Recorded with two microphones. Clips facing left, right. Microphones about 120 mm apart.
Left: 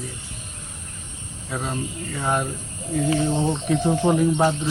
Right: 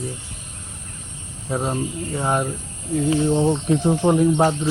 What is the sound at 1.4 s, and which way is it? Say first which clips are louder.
Speech: right 5 dB; 25° right (ahead or behind).